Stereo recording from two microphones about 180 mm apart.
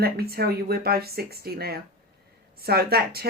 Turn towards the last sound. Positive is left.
turn(degrees=-60)  # may be behind; listen again after turning